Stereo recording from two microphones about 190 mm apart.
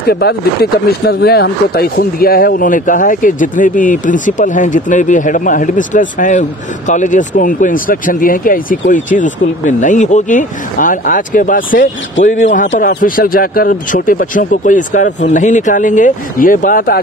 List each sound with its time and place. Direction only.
0.1 s speech: 55° left (ahead or behind)